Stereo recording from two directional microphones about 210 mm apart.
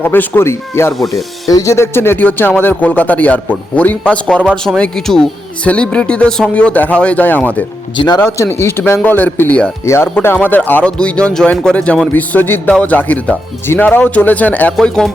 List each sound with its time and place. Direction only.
0.0 s speech: 10° left (ahead or behind)
7.9 s speech: 20° left (ahead or behind); by 15.1 s 5° left (ahead or behind)